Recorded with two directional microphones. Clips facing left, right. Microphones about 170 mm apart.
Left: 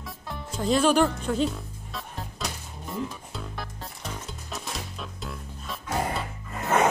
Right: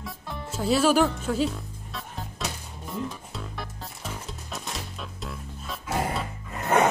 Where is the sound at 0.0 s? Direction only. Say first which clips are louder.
Right 1 dB; 5° right (ahead or behind).